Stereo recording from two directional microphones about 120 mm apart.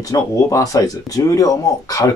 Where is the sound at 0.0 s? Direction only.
25° left (ahead or behind).